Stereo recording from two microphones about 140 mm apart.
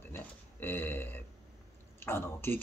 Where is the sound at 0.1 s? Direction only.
15° left (ahead or behind).